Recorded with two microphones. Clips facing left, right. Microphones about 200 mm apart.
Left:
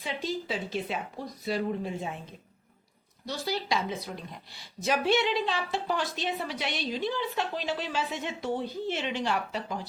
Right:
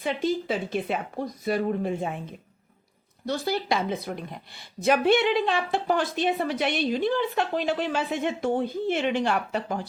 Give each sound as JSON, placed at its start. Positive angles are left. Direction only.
{"t": 0.0, "sound": "a woman's voice", "side_deg": -55}
{"t": 3.2, "sound": "a woman's voice", "side_deg": -55}